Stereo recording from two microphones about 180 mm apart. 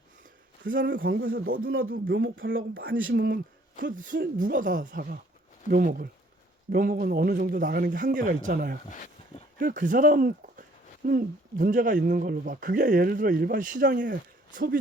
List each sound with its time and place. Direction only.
0.9 s a man's voice: 60° right (ahead or behind); by 1.4 s 80° right
1.5 s speech: 55° right (ahead or behind)
2.0 s speech: 90° right
3.0 s speech: 55° right (ahead or behind)